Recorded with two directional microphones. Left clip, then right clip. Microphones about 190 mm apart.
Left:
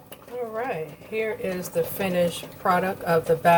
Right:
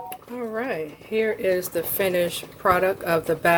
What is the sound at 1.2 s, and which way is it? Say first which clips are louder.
Speech: right 6 dB; 60° right (ahead or behind).